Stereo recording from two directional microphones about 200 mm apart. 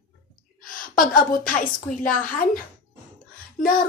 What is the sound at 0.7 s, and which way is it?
A woman's voice, 45° left (ahead or behind).